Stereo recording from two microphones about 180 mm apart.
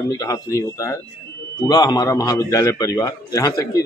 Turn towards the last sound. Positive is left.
turn(degrees=20)  # may be behind; listen again after turning